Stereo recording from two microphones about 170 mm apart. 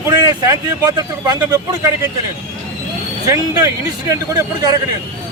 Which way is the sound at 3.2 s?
20° right (ahead or behind).